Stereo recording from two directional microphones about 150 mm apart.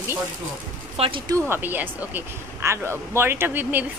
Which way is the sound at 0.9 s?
40° right (ahead or behind).